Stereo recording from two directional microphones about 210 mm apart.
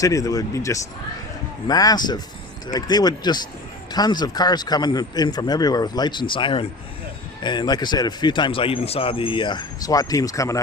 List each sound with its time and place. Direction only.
0.0 s a man's voice: 15° left (ahead or behind)